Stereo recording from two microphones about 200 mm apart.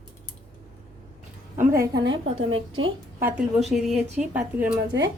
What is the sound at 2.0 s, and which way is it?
Speech, 80° right.